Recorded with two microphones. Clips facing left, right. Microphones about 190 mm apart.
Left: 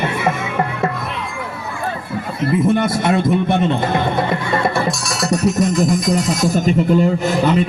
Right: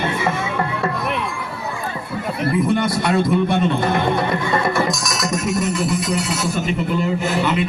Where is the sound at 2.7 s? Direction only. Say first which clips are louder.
Left 2 dB; 20° left (ahead or behind).